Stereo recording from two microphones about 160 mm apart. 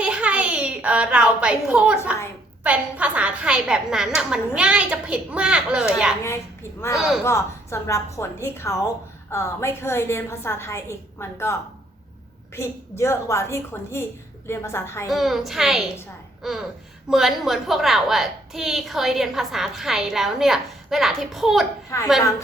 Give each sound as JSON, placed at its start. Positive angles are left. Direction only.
{"t": 0.0, "sound": "a sound", "side_deg": -5}
{"t": 2.6, "sound": "a woman's voice", "side_deg": -10}
{"t": 7.3, "sound": "a woman's voice", "side_deg": 15}
{"t": 12.5, "sound": "a woman's voice", "side_deg": 15}
{"t": 15.1, "sound": "a woman's voice", "side_deg": 0}
{"t": 21.8, "sound": "a woman's voice", "side_deg": 20}